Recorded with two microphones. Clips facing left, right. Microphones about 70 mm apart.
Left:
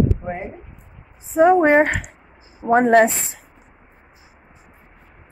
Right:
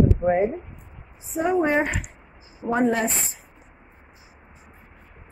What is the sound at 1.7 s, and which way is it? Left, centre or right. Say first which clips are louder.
Speech: left 7 dB; left.